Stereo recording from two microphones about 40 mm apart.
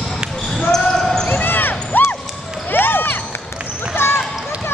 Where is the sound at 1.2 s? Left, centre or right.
Left.